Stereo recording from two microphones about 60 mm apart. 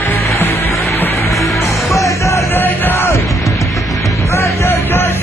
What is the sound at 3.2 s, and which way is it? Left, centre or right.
Music, left.